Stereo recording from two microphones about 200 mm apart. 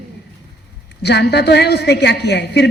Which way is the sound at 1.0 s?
55° left (ahead or behind).